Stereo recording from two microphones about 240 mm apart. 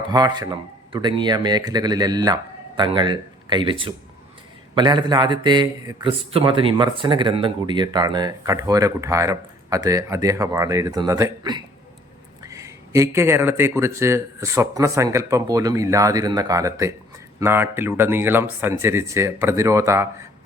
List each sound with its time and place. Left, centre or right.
0.1 s speech: centre